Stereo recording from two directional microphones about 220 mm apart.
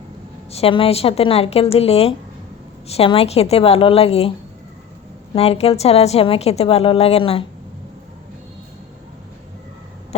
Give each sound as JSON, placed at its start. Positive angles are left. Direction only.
{"t": 0.5, "sound": "a woman's voice", "side_deg": 25}
{"t": 5.3, "sound": "a woman's voice", "side_deg": 25}